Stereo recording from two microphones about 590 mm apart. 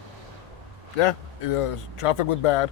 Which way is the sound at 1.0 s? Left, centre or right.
Left.